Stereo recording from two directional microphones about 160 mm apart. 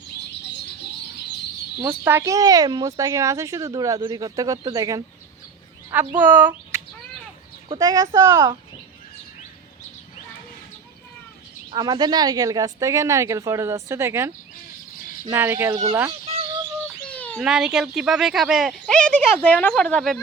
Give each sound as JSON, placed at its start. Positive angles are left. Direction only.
{"t": 1.8, "sound": "speech", "side_deg": -15}
{"t": 6.1, "sound": "speech", "side_deg": -10}
{"t": 11.7, "sound": "speech", "side_deg": -25}
{"t": 17.1, "sound": "bird", "side_deg": 10}
{"t": 17.4, "sound": "speech", "side_deg": -5}